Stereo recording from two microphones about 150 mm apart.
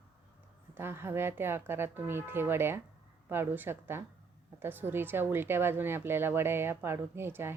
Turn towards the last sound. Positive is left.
turn(degrees=-15)  # may be behind; listen again after turning